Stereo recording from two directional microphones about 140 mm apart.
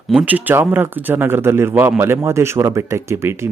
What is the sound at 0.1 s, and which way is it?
Speech, 10° right (ahead or behind).